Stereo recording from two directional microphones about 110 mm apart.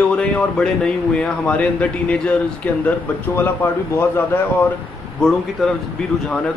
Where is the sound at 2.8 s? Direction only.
20° left (ahead or behind).